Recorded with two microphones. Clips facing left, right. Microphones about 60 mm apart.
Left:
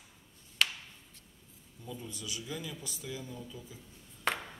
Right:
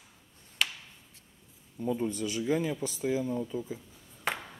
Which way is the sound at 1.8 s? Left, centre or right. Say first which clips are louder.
Right 14 dB; right.